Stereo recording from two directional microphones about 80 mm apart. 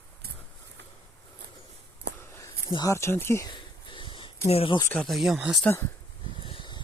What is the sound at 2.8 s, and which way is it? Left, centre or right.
Speech, left.